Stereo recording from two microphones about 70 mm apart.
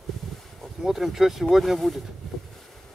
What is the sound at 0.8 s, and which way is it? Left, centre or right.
Speech, centre.